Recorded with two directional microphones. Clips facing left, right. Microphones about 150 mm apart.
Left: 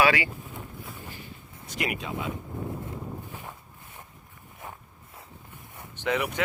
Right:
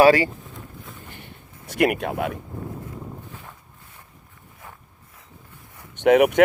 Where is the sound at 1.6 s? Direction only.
60° right (ahead or behind).